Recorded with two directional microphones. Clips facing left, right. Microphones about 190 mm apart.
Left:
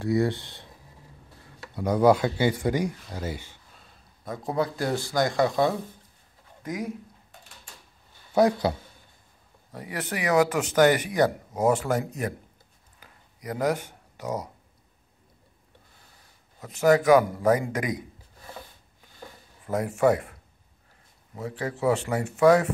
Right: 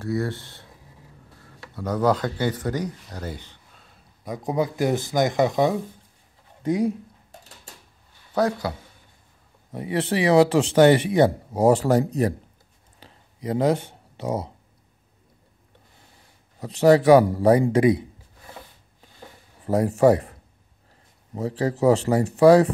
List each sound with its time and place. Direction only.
0.0 s speech: 15° left (ahead or behind)
1.8 s speech: 10° left (ahead or behind)
4.2 s speech: 15° right (ahead or behind)
6.6 s speech: 30° right (ahead or behind)
8.3 s speech: 15° left (ahead or behind)
9.7 s speech: 25° right (ahead or behind)
13.0 s a sound: 25° right (ahead or behind)
16.5 s a man's voice: 35° right (ahead or behind)
19.6 s speech: 35° right (ahead or behind)
21.4 s a man's voice: 35° right (ahead or behind)